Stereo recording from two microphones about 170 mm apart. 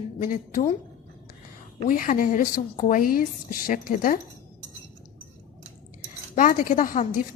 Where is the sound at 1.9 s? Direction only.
55° left (ahead or behind).